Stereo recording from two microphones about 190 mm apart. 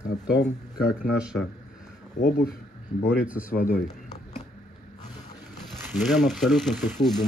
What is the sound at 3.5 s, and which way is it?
Speech, 55° left (ahead or behind).